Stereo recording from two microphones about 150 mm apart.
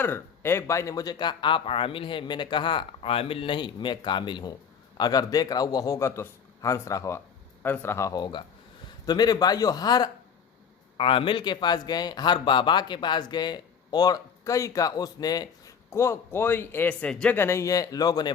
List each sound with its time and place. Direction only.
0.0 s speech: 15° left (ahead or behind)